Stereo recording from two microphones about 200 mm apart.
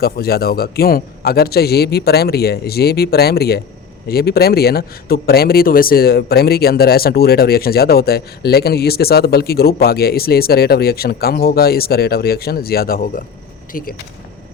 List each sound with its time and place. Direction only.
0.0 s speech: 50° left (ahead or behind)